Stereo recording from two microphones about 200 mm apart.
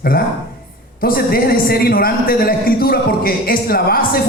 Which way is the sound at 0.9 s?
45° left (ahead or behind).